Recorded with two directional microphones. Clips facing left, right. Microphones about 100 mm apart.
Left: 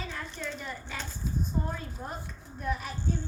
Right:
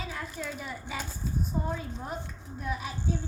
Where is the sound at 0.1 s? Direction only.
5° right (ahead or behind).